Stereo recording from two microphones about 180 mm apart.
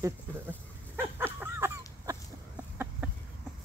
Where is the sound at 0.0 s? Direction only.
10° right (ahead or behind).